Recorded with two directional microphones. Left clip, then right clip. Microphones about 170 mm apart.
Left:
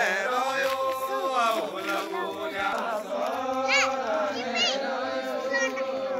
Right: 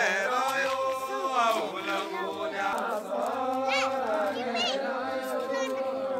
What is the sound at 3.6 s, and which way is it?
Cat, 75° right (ahead or behind).